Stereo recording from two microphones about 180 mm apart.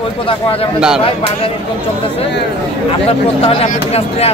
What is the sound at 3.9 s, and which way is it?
Speech, 35° left (ahead or behind).